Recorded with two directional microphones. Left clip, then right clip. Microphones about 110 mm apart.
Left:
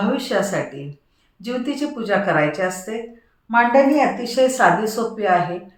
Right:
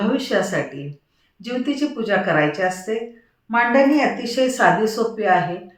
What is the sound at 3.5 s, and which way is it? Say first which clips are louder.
Speech: left 1 dB; 5° left (ahead or behind).